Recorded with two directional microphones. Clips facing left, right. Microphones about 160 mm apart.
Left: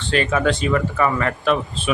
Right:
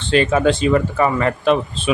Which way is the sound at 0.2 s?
30° right (ahead or behind).